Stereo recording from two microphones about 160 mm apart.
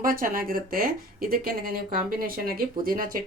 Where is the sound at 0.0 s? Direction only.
65° right (ahead or behind).